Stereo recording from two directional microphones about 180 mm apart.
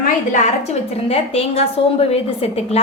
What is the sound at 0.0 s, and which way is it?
A woman's voice, 40° left (ahead or behind).